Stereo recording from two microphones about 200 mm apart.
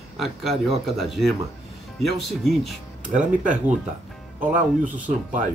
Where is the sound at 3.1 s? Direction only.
40° right (ahead or behind).